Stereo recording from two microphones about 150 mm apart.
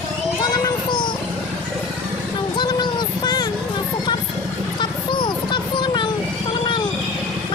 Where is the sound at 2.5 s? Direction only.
30° left (ahead or behind).